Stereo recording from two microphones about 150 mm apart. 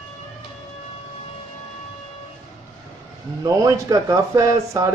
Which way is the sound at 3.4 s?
25° right (ahead or behind).